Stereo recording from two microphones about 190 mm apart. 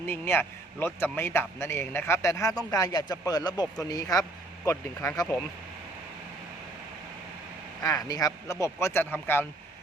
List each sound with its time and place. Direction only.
0.1 s a man's voice: 10° left (ahead or behind)
7.9 s a man's voice: 20° left (ahead or behind)